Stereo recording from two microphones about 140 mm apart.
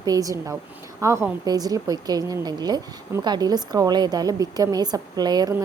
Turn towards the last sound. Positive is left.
turn(degrees=-30)  # may be behind; listen again after turning